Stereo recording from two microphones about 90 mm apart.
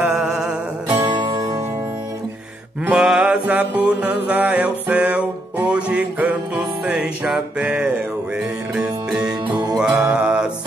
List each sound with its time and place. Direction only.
0.2 s music: 5° right (ahead or behind)
0.8 s music: 30° right (ahead or behind)
2.8 s music: 10° right (ahead or behind)
9.8 s music: 10° right (ahead or behind)